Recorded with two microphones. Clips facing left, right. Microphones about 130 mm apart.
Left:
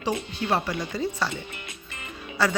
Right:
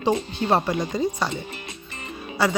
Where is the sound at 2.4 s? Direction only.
15° right (ahead or behind).